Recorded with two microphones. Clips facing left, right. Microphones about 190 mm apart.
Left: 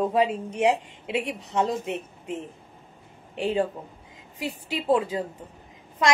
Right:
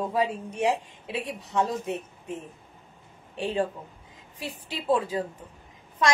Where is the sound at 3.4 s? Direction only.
20° left (ahead or behind).